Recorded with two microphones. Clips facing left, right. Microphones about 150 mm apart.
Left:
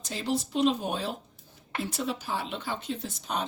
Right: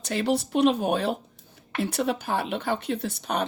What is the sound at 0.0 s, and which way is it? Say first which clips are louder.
Speech: right 6 dB; 65° right (ahead or behind).